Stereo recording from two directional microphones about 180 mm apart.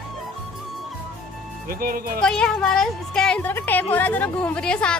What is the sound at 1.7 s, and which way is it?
Speech, 55° right (ahead or behind).